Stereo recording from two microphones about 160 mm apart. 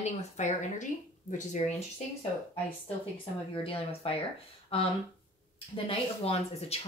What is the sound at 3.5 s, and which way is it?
Speech, 35° left (ahead or behind).